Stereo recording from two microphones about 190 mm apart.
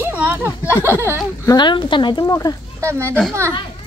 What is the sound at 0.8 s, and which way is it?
Speech, 10° right (ahead or behind).